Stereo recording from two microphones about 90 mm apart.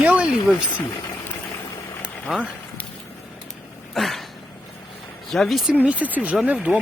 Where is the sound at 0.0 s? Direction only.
15° right (ahead or behind).